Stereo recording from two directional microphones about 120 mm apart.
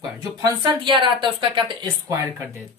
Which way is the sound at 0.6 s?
40° right (ahead or behind).